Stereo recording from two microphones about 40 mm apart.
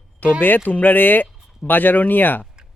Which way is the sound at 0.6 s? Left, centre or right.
Left.